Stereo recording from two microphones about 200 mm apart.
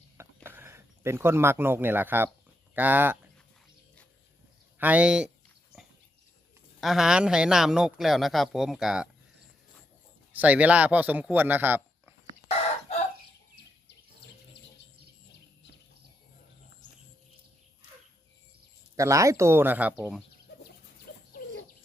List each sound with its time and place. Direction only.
0.4 s a man's voice: 10° right (ahead or behind)
4.8 s a man's voice: 5° right (ahead or behind)
6.7 s a man's voice: centre (ahead or behind)
10.3 s a man's voice: 5° right (ahead or behind)
12.9 s chicken: 30° left (ahead or behind)
18.9 s a man's voice: 15° right (ahead or behind)
21.1 s bird: 45° left (ahead or behind)